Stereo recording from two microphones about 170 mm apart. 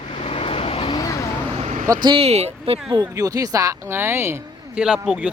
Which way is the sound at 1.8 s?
20° right (ahead or behind).